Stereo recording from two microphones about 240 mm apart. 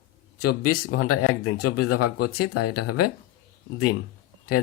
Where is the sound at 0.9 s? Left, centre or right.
Left.